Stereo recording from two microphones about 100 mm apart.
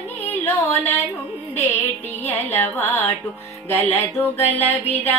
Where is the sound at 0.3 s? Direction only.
20° left (ahead or behind).